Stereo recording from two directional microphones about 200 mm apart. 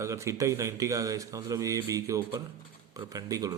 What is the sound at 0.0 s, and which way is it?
Speech, 15° right (ahead or behind).